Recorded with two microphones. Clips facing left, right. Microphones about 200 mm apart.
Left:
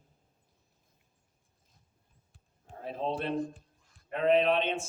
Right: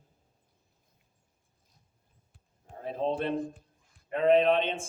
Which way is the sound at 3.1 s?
55° right (ahead or behind).